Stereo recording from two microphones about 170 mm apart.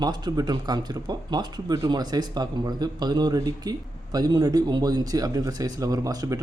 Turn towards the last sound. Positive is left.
turn(degrees=-20)  # may be behind; listen again after turning